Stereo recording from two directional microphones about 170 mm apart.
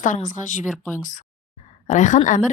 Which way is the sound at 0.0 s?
50° left (ahead or behind).